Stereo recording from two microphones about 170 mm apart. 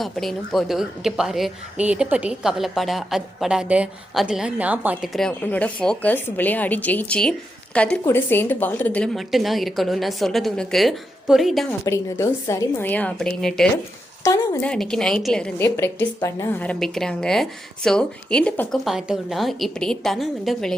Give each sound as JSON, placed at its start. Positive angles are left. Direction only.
{"t": 0.0, "sound": "a woman's voice", "side_deg": 0}
{"t": 5.1, "sound": "a woman's voice", "side_deg": 5}
{"t": 11.9, "sound": "speech", "side_deg": 15}
{"t": 14.3, "sound": "speech", "side_deg": 20}
{"t": 14.6, "sound": "a woman's voice", "side_deg": 5}
{"t": 18.9, "sound": "a woman's voice", "side_deg": -5}